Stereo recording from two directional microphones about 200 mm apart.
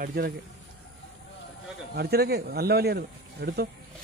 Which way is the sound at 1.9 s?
50° right (ahead or behind).